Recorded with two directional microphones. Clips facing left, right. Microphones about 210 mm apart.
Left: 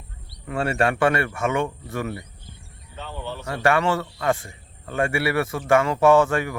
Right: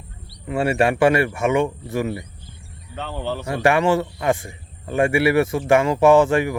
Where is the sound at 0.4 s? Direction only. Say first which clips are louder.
Right 4 dB; 10° right (ahead or behind).